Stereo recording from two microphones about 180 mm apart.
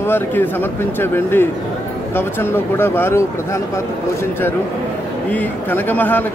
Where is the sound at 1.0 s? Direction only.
10° left (ahead or behind).